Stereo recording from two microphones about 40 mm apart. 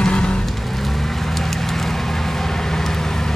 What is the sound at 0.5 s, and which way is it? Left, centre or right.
Vehicle, centre.